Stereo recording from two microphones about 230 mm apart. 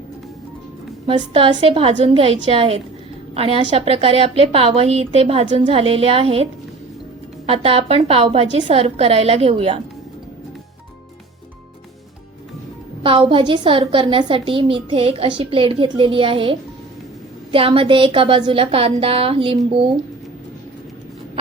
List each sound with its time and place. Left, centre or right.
1.1 s a woman's voice: right
13.0 s a woman's voice: right